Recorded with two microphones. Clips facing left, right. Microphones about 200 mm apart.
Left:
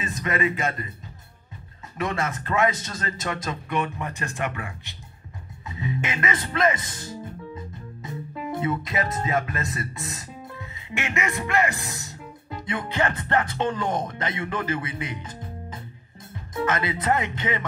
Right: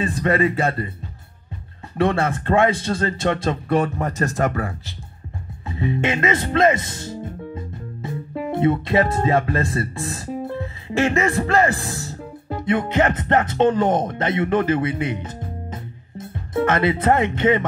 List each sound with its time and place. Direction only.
0.0 s speech: 35° right (ahead or behind)
2.0 s speech: 30° right (ahead or behind)
5.7 s music: 30° right (ahead or behind)
6.2 s speech: 25° right (ahead or behind)
16.5 s speech: 30° right (ahead or behind)